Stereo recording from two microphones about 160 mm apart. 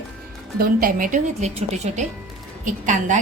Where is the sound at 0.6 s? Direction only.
60° right (ahead or behind).